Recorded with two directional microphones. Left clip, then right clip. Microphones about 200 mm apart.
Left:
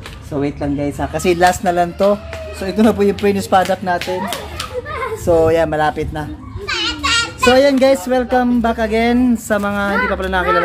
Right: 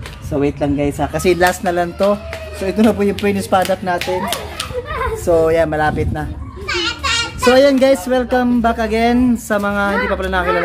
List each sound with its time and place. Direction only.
0.3 s speech: 5° right (ahead or behind); by 4.0 s 15° left (ahead or behind)
5.2 s speech: 15° left (ahead or behind)
7.4 s speech: centre (ahead or behind)